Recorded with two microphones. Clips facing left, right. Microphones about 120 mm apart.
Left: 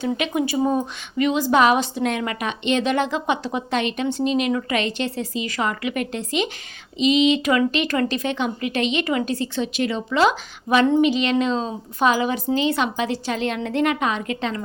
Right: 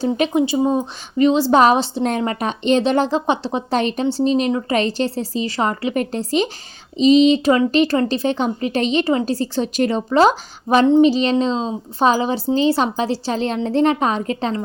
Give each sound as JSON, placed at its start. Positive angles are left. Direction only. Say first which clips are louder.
{"t": 0.0, "sound": "a woman's voice", "louder": "right 5 dB", "side_deg": -35}
{"t": 0.4, "sound": "a woman's voice", "louder": "right 3 dB", "side_deg": -25}